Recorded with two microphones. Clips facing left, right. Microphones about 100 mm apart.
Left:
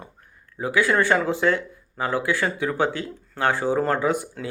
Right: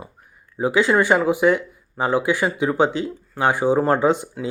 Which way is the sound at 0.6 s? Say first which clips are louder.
Right 3 dB; 20° right (ahead or behind).